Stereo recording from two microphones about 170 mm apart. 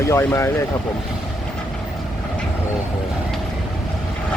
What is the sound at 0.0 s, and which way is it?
Speech, 15° left (ahead or behind).